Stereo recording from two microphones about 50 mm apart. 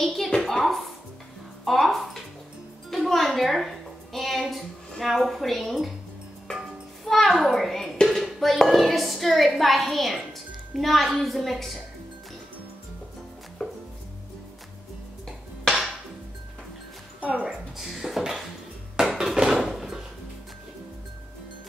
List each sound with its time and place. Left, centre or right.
0.0 s a sound: centre
1.6 s a woman's voice: centre
7.1 s a child's voice: centre
13.6 s music: centre
15.6 s music: centre
17.2 s a woman's voice: right
17.5 s speech: centre
19.1 s a sound: centre